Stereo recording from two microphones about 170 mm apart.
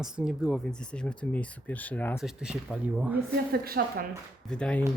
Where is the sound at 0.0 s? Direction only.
5° right (ahead or behind).